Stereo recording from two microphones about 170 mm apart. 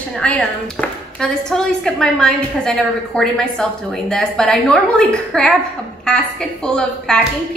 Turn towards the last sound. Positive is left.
turn(degrees=5)  # may be behind; listen again after turning